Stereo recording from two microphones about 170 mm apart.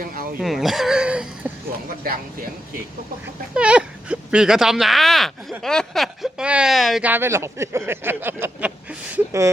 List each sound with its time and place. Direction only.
0.0 s a sound: 55° right (ahead or behind)
0.3 s speech: centre (ahead or behind)
3.5 s speech: 5° right (ahead or behind)